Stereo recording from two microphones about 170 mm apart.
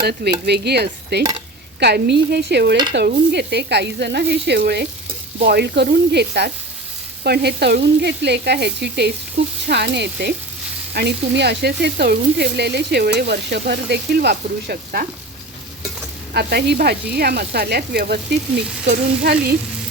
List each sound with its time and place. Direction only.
0.0 s speech: 70° right (ahead or behind)
16.3 s speech: 75° right (ahead or behind)